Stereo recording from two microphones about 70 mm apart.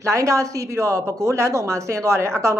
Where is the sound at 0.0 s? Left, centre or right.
Right.